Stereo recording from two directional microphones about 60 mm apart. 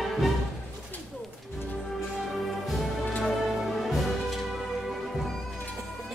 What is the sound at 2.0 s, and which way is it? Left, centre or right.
Music, centre.